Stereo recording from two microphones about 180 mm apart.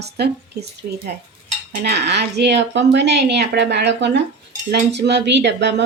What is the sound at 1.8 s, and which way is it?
Speech, 65° right (ahead or behind).